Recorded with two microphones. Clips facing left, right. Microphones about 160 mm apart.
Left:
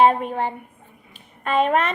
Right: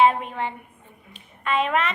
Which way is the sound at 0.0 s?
45° left (ahead or behind).